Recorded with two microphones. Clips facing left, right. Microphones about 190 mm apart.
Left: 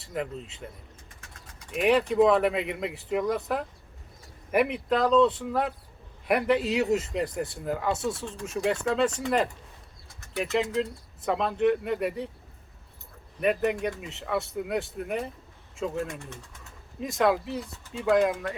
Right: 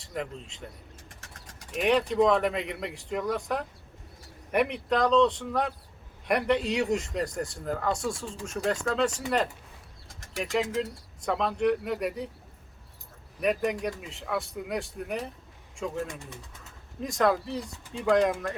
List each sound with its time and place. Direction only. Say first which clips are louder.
0.0 s speech: left 2 dB; 5° left (ahead or behind)
1.7 s speech: left 2 dB; 5° left (ahead or behind)
13.4 s speech: left 2 dB; centre (ahead or behind)